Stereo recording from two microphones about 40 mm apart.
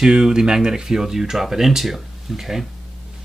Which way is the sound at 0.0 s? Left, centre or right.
Centre.